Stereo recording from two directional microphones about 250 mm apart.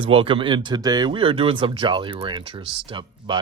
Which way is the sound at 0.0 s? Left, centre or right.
Right.